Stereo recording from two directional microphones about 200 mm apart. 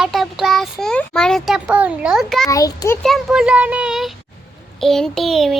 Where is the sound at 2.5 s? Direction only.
15° left (ahead or behind).